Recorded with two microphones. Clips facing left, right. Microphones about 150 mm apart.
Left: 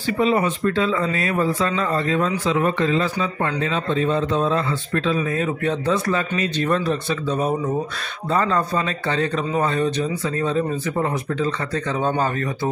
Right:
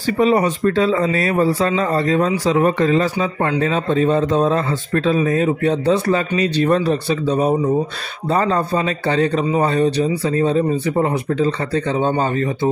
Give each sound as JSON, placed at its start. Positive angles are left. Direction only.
{"t": 0.2, "sound": "a man's voice", "side_deg": -40}